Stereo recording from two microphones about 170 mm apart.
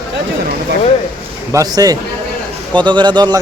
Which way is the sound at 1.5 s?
20° right (ahead or behind).